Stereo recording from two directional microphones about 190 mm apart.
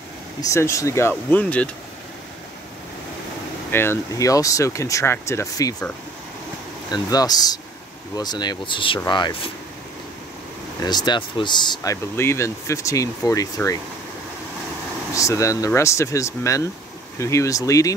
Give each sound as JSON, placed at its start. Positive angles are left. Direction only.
{"t": 0.4, "sound": "speech", "side_deg": 15}
{"t": 3.7, "sound": "speech", "side_deg": 15}
{"t": 6.9, "sound": "speech", "side_deg": 20}
{"t": 10.8, "sound": "speech", "side_deg": 20}
{"t": 15.1, "sound": "speech", "side_deg": 15}